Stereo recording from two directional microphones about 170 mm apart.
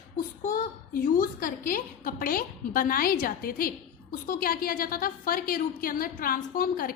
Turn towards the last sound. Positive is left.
turn(degrees=55)  # may be behind; listen again after turning